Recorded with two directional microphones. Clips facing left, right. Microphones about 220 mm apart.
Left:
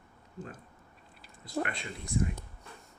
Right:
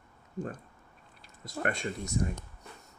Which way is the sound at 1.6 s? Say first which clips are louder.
Right 7 dB; 45° right (ahead or behind).